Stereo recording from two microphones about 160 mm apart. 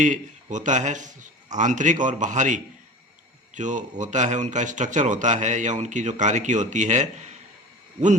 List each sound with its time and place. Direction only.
0.0 s speech: 50° right (ahead or behind)